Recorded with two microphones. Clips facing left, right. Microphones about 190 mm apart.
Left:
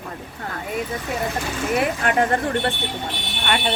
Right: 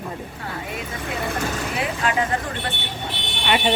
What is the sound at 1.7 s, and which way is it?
Speech, 55° left (ahead or behind).